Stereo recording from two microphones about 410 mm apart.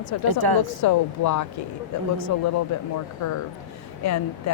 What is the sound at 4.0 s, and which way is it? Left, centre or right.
Speech, left.